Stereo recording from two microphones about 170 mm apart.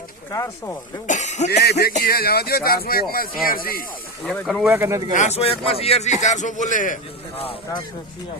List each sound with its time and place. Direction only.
0.3 s speech: 20° left (ahead or behind)
1.0 s a man's voice: 45° left (ahead or behind)
1.5 s music: 70° left (ahead or behind)
1.9 s speech: 60° left (ahead or behind)
4.3 s speech: 5° left (ahead or behind)
4.7 s speech: 15° right (ahead or behind)
5.1 s a man's voice: 40° left (ahead or behind)